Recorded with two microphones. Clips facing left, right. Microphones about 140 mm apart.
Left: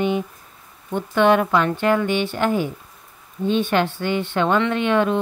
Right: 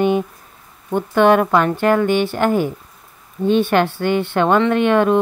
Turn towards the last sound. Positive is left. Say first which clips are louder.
# right 5 dB
turn(degrees=-50)  # may be behind; listen again after turning